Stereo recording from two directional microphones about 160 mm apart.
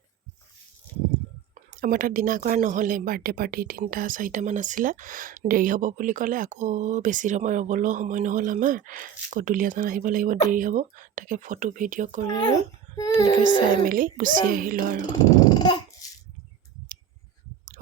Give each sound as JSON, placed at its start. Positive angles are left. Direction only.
{"t": 1.8, "sound": "speech", "side_deg": -60}
{"t": 13.4, "sound": "speech", "side_deg": -60}
{"t": 15.2, "sound": "dog", "side_deg": 25}